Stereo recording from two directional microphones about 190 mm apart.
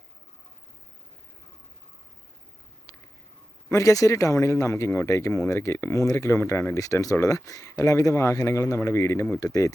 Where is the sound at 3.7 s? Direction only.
15° left (ahead or behind).